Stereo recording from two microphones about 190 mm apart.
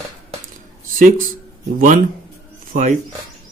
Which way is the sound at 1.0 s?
45° right (ahead or behind).